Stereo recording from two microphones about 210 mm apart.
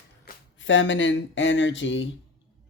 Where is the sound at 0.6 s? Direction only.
65° left (ahead or behind).